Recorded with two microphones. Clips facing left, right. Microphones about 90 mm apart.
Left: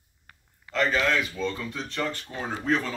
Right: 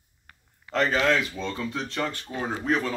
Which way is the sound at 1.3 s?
10° right (ahead or behind).